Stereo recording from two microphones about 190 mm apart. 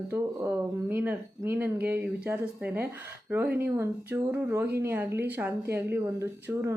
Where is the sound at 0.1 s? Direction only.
10° right (ahead or behind).